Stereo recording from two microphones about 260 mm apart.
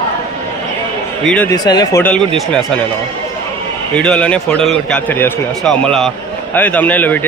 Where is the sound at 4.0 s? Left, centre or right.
Centre.